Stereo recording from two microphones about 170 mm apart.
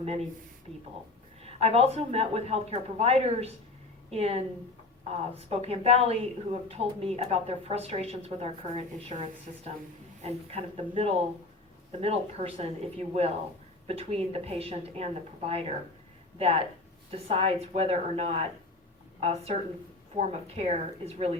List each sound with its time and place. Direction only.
0.0 s speech: 35° right (ahead or behind)
1.4 s speech: 35° right (ahead or behind)
10.2 s speech: 35° right (ahead or behind)